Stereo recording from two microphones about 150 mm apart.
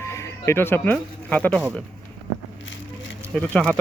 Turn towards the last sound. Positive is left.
turn(degrees=5)  # may be behind; listen again after turning